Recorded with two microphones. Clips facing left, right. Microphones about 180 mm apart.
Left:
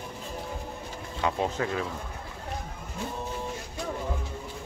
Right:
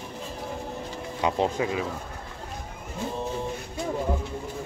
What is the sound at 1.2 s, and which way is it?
Speech, 20° right (ahead or behind).